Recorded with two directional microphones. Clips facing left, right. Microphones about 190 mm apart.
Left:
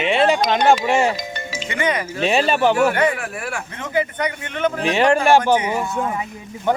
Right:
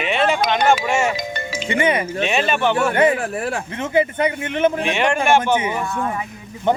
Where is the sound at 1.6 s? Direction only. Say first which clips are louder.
Right 3 dB; 25° right (ahead or behind).